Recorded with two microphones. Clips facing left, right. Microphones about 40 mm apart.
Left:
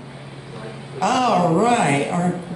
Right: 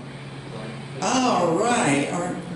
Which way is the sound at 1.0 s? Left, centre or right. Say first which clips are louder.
Left 3 dB; centre.